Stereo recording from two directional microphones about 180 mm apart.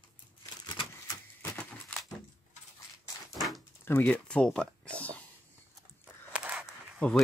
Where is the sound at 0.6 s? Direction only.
25° left (ahead or behind).